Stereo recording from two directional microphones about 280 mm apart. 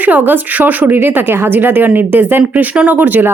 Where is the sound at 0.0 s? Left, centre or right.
Centre.